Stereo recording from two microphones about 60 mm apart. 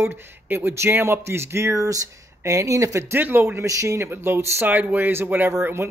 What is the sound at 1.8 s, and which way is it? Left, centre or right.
Speech, right.